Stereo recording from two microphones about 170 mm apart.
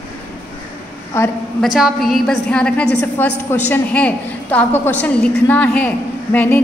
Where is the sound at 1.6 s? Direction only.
Centre (ahead or behind).